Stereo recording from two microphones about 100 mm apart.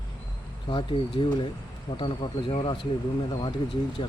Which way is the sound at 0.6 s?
60° left (ahead or behind).